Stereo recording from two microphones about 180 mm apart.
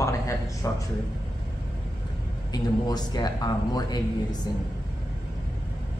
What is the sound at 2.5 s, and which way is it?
A man's voice, 20° left (ahead or behind).